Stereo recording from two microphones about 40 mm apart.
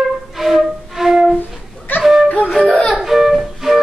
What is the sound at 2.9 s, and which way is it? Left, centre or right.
Music, centre.